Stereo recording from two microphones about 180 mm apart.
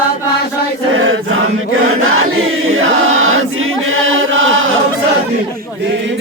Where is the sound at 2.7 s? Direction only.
90° right.